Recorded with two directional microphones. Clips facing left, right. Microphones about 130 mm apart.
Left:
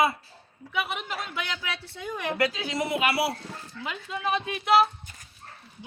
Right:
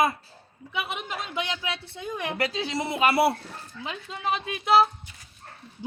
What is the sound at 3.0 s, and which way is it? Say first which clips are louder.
Speech: right 7 dB; 50° right (ahead or behind).